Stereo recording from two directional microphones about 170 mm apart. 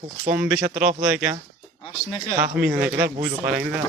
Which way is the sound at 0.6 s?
50° right (ahead or behind).